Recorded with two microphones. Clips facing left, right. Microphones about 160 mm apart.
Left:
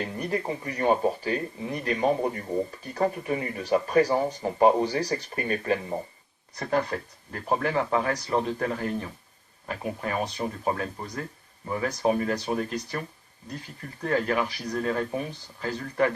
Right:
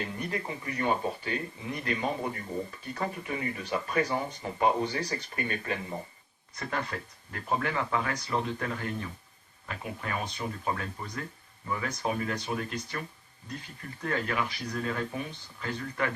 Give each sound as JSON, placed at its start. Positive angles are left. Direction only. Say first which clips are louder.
{"t": 0.0, "sound": "speech", "louder": "left 5 dB", "side_deg": 35}